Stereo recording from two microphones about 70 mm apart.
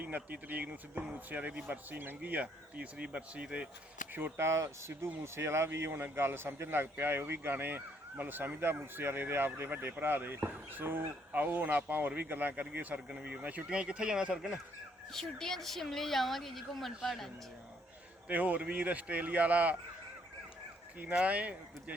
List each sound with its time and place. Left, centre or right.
0.0 s speech: right
4.1 s speech: right; by 14.6 s centre
15.1 s speech: centre
18.3 s speech: right
21.0 s speech: centre